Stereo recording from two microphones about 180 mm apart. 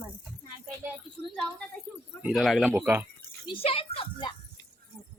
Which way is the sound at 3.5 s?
30° left (ahead or behind).